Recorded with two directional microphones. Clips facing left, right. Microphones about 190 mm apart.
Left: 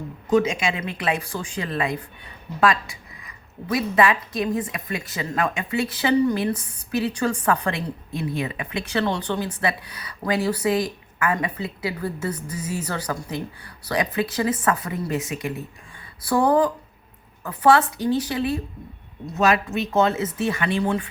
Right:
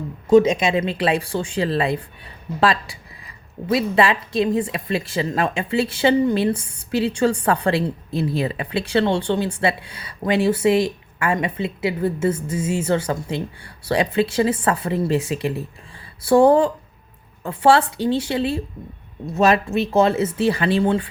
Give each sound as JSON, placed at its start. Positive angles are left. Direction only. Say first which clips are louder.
{"t": 0.7, "sound": "a woman's voice", "louder": "right 6 dB", "side_deg": -30}